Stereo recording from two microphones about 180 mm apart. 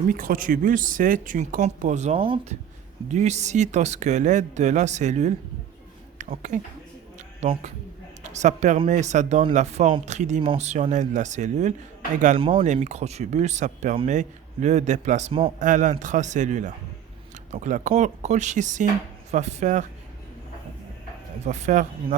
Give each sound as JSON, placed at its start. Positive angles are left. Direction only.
{"t": 0.1, "sound": "speech", "side_deg": -50}
{"t": 7.4, "sound": "speech", "side_deg": -35}
{"t": 12.4, "sound": "speech", "side_deg": -30}
{"t": 12.6, "sound": "speech", "side_deg": -40}
{"t": 15.5, "sound": "speech", "side_deg": -45}
{"t": 21.4, "sound": "speech", "side_deg": -40}